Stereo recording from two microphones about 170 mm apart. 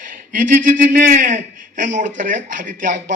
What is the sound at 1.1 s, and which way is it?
Speech, 50° right (ahead or behind).